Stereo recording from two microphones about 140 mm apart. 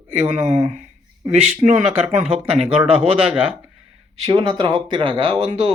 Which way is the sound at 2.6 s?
45° right (ahead or behind).